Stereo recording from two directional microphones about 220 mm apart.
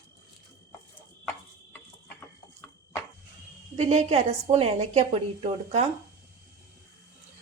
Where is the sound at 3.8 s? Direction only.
30° right (ahead or behind).